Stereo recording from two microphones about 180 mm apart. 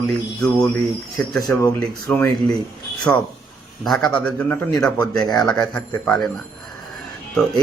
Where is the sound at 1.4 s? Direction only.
15° left (ahead or behind).